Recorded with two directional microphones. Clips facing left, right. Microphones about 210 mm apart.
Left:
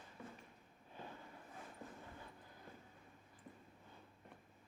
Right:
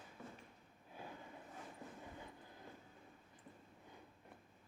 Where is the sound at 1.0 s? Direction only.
10° right (ahead or behind).